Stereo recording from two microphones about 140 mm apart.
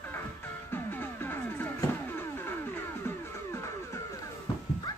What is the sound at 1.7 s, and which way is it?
Vehicle, 15° left (ahead or behind).